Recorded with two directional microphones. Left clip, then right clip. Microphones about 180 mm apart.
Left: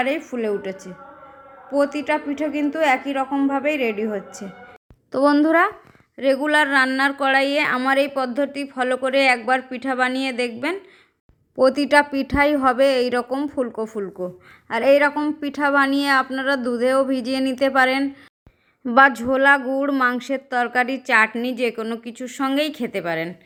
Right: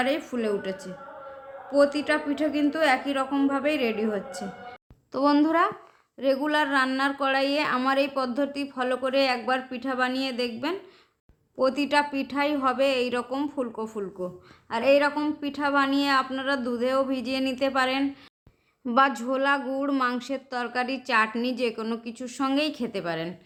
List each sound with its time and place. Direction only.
0.0 s a woman's voice: 20° left (ahead or behind)